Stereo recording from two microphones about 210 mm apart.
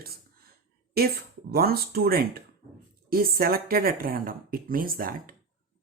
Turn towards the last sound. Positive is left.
turn(degrees=-45)  # may be behind; listen again after turning